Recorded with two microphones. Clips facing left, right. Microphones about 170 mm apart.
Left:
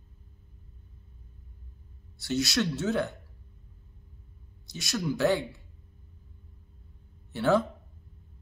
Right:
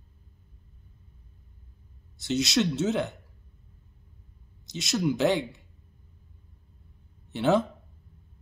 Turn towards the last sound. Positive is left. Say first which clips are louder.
# right 1 dB
turn(degrees=-20)  # may be behind; listen again after turning